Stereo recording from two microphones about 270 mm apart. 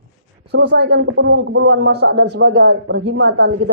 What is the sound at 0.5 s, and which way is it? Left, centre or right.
A man's voice, right.